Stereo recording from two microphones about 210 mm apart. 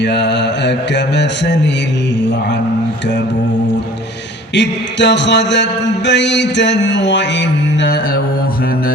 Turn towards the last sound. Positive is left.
turn(degrees=55)  # may be behind; listen again after turning